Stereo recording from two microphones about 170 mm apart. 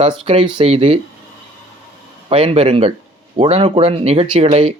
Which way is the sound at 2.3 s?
35° right (ahead or behind).